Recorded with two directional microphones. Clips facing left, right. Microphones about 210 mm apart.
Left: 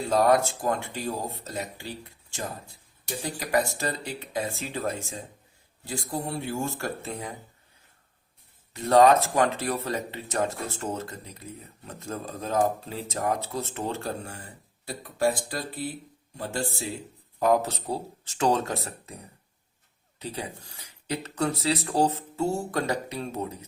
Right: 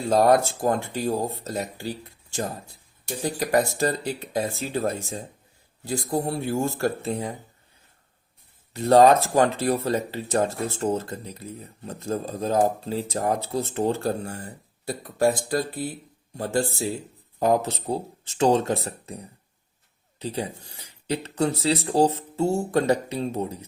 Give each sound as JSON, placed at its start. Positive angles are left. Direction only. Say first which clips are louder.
{"t": 0.1, "sound": "speech", "louder": "right 3 dB", "side_deg": -35}
{"t": 3.2, "sound": "speech", "louder": "right 4 dB", "side_deg": -40}
{"t": 8.7, "sound": "speech", "louder": "right 3 dB", "side_deg": -35}
{"t": 17.4, "sound": "speech", "louder": "right 1 dB", "side_deg": -30}
{"t": 20.1, "sound": "speech", "louder": "right 5 dB", "side_deg": -30}